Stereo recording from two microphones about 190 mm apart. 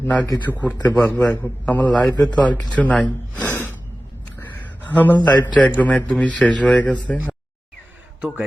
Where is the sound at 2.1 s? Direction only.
20° left (ahead or behind).